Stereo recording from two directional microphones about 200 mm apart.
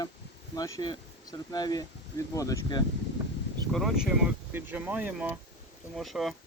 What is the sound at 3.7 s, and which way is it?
Speech, centre (ahead or behind).